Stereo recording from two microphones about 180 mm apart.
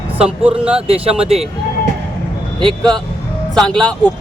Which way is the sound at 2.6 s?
5° left (ahead or behind).